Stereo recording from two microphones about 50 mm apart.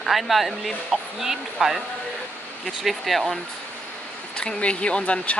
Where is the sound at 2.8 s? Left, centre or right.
Centre.